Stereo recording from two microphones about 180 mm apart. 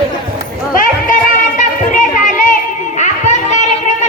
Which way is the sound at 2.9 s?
40° left (ahead or behind).